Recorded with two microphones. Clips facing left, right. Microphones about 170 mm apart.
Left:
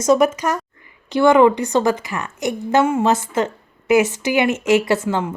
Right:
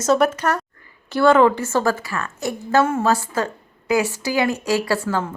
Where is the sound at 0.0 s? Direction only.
10° left (ahead or behind).